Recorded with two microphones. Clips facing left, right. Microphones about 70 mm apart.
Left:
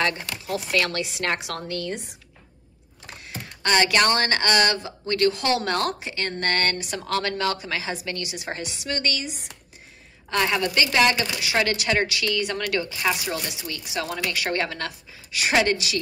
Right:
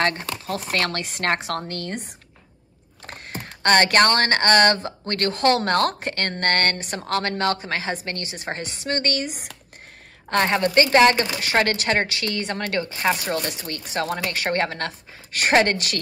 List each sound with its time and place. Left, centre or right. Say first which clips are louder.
0.0 s speech: right 2 dB; right
3.1 s typing: right 3 dB; right
4.2 s speech: right 4 dB; right
10.3 s a woman's voice: right 4 dB; right